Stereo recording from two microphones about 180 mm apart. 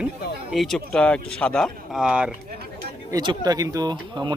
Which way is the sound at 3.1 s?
25° right (ahead or behind).